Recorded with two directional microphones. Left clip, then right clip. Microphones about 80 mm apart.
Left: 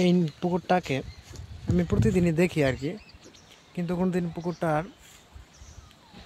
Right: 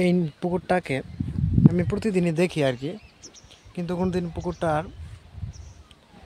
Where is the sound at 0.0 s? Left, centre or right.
Right.